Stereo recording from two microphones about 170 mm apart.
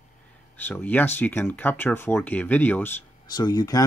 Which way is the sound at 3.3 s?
25° left (ahead or behind).